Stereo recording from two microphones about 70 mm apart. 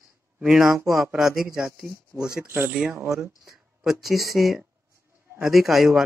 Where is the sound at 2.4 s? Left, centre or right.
Right.